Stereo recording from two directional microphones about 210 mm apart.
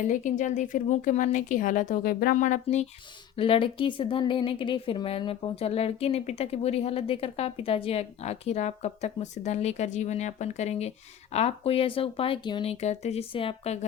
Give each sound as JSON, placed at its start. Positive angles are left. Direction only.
{"t": 0.0, "sound": "a woman's voice", "side_deg": 35}